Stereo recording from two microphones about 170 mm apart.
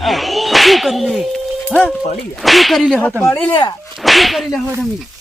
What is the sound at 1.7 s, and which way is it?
Speech, centre (ahead or behind).